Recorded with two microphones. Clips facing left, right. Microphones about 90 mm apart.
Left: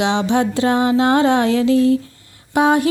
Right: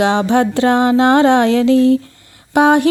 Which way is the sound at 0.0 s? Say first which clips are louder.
Right 4 dB; 45° right (ahead or behind).